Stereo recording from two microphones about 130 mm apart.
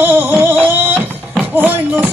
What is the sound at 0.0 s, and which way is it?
Music, 15° right (ahead or behind).